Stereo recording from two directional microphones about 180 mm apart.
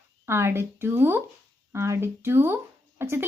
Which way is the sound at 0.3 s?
15° right (ahead or behind).